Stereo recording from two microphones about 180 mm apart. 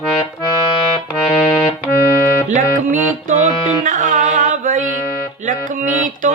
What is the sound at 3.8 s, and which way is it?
Music, 45° right (ahead or behind).